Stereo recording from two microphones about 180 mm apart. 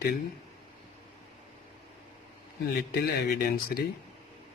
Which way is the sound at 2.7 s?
65° left (ahead or behind).